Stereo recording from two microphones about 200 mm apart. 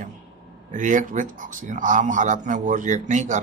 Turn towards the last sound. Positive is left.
turn(degrees=-35)  # may be behind; listen again after turning